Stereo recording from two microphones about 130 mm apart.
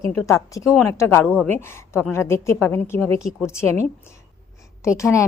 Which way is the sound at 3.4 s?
20° left (ahead or behind).